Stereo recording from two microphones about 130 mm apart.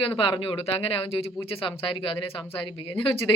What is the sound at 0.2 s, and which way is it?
Speech, 45° left (ahead or behind).